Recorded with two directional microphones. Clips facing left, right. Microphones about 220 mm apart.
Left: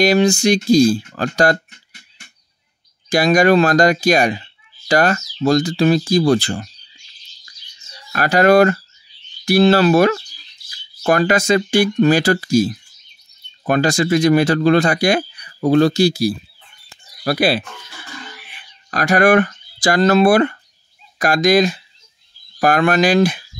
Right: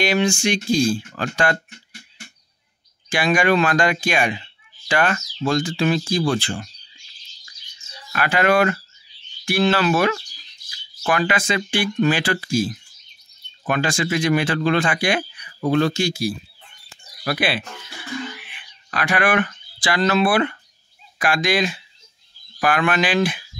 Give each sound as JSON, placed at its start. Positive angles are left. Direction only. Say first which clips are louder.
{"t": 0.0, "sound": "speech", "louder": "left 6 dB", "side_deg": 40}
{"t": 3.1, "sound": "speech", "louder": "left 6 dB", "side_deg": 40}
{"t": 8.1, "sound": "speech", "louder": "left 6 dB", "side_deg": 40}
{"t": 18.3, "sound": "a sound", "louder": "right 1 dB", "side_deg": 40}
{"t": 21.2, "sound": "speech", "louder": "left 7 dB", "side_deg": 40}